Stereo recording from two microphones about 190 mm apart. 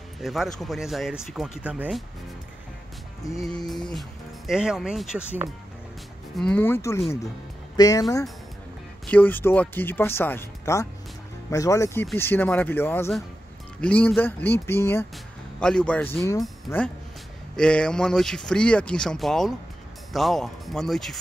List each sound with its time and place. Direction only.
0.2 s speech: centre (ahead or behind)
3.3 s speech: centre (ahead or behind)
6.3 s speech: 5° left (ahead or behind)